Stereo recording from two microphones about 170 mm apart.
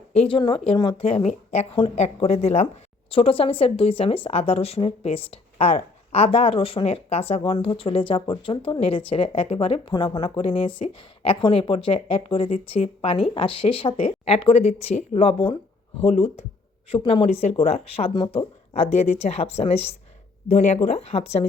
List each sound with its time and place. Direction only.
0.1 s a woman's voice: 35° left (ahead or behind)